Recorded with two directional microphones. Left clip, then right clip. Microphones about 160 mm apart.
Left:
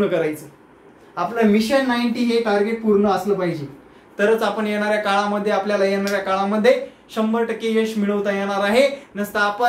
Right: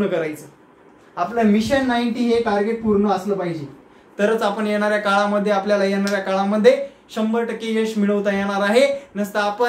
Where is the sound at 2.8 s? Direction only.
5° left (ahead or behind).